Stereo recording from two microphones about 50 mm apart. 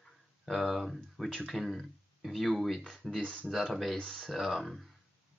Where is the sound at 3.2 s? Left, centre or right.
Centre.